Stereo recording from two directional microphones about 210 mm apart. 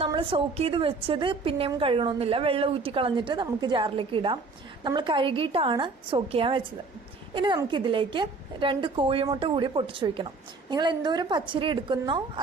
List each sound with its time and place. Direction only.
0.0 s a woman's voice: 25° right (ahead or behind)